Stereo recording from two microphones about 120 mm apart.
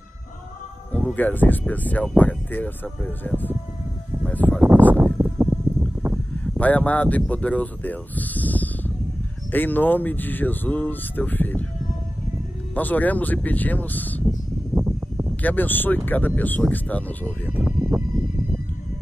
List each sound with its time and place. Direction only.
0.9 s speech: 10° left (ahead or behind)
5.2 s music: 15° right (ahead or behind)
6.4 s speech: 10° left (ahead or behind)
12.7 s speech: 15° left (ahead or behind)
14.8 s a sound: 15° right (ahead or behind)
15.4 s speech: 15° left (ahead or behind)
17.6 s a sound: 20° right (ahead or behind)